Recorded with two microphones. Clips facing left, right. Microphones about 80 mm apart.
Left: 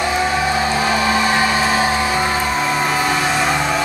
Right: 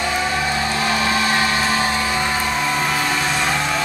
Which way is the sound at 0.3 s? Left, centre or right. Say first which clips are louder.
Left 4 dB; centre.